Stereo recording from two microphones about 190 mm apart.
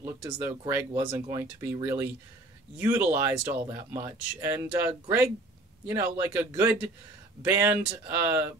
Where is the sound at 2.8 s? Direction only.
10° right (ahead or behind).